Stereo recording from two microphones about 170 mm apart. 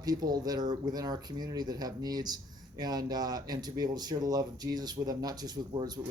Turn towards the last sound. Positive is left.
turn(degrees=-25)  # may be behind; listen again after turning